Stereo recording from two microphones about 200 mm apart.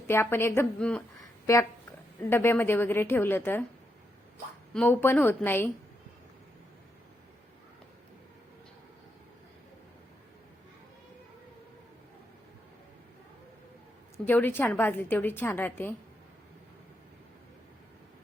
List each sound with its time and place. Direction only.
0.1 s a woman's voice: 10° left (ahead or behind)
1.2 s a sound: 15° left (ahead or behind)
2.3 s a woman's voice: 10° left (ahead or behind)
4.7 s a woman's voice: 5° left (ahead or behind)
14.3 s a woman's voice: 10° left (ahead or behind)